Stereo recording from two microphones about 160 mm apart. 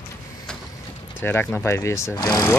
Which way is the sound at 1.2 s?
10° left (ahead or behind).